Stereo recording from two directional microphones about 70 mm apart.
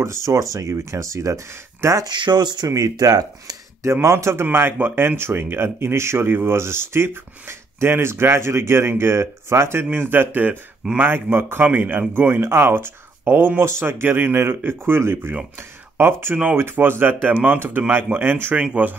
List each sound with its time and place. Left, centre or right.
0.0 s speech: right
2.0 s speech: right
2.7 s speech: right
3.9 s speech: right
18.6 s speech: centre